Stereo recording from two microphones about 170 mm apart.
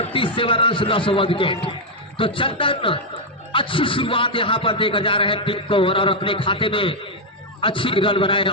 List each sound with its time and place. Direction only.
0.0 s a man's voice: 30° left (ahead or behind)